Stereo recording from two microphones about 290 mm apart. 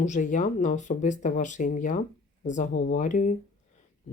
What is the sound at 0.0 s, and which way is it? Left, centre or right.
Speech, left.